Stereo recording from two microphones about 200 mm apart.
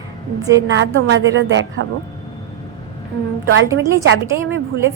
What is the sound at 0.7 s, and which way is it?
A woman's voice, 70° right (ahead or behind).